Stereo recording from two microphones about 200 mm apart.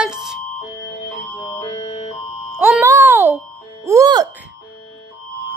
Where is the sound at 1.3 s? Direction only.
15° left (ahead or behind).